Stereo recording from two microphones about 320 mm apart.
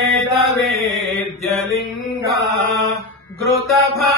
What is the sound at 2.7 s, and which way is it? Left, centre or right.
Mantra, centre.